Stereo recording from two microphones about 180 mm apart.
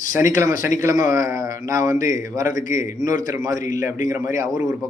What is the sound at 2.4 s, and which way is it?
Speech, 50° left (ahead or behind).